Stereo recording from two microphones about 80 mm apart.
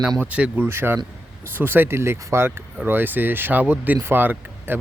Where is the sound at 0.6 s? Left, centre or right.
Right.